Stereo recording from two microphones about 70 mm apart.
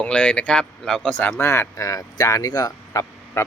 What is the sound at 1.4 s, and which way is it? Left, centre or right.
Speech, left.